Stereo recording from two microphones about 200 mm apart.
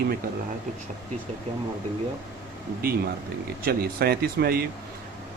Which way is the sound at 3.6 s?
50° right (ahead or behind).